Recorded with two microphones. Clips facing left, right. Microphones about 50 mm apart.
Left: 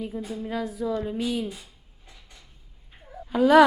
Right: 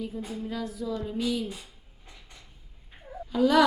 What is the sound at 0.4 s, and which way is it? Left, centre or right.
A woman's voice, left.